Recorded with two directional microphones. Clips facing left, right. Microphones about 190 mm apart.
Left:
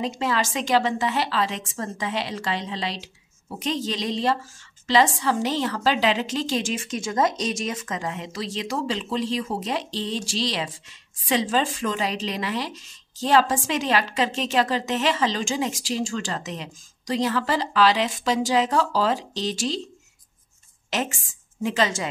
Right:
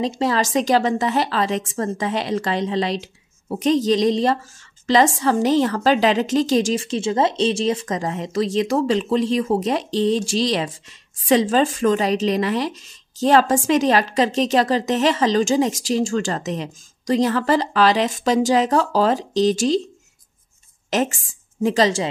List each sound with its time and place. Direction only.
0.0 s a woman's voice: 35° right (ahead or behind)
20.9 s a woman's voice: 45° right (ahead or behind)